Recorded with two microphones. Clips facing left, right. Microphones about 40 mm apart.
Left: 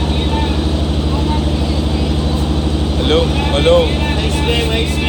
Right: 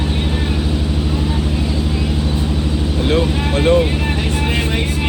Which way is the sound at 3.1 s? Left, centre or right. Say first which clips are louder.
Left 3 dB; left.